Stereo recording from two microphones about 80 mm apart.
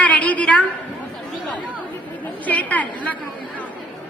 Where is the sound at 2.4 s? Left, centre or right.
Centre.